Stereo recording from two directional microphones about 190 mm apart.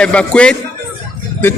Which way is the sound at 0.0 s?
5° left (ahead or behind).